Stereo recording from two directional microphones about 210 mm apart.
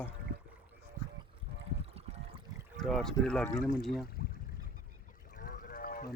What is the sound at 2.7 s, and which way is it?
Speech, centre (ahead or behind).